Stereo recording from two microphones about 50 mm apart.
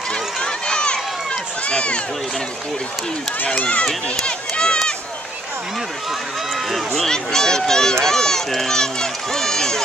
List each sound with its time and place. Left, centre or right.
0.1 s run: centre
3.8 s run: centre
7.1 s speech: centre